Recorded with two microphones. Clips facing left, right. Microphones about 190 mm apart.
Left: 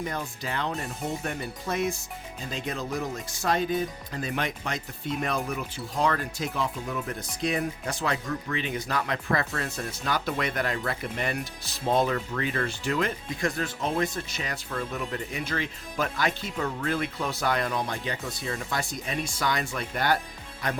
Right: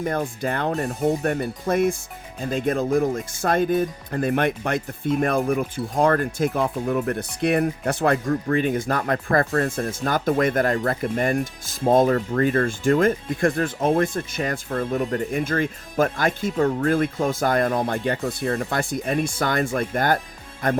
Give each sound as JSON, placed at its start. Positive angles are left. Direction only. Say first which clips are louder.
{"t": 0.0, "sound": "speech", "louder": "right 8 dB", "side_deg": -50}